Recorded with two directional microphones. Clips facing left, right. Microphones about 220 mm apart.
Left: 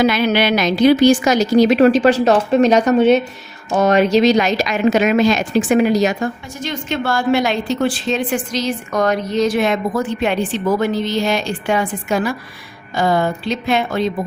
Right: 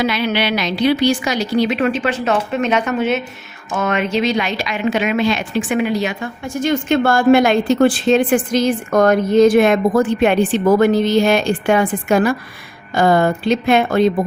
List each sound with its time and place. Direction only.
0.0 s a woman's voice: 45° left (ahead or behind)
6.6 s a woman's voice: 50° right (ahead or behind)